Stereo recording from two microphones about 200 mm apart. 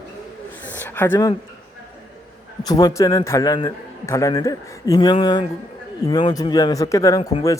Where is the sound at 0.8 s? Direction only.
10° left (ahead or behind).